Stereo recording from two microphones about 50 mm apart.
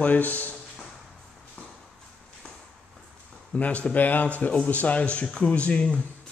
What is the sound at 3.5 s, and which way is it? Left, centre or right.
Speech, left.